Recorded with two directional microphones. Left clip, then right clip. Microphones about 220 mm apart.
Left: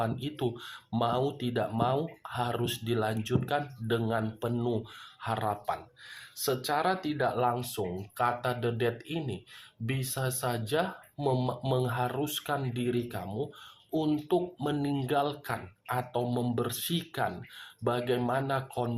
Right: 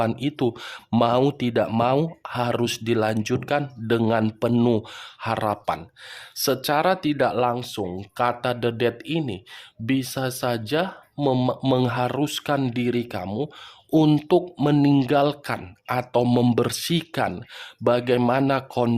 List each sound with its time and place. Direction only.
0.0 s speech: 50° right (ahead or behind)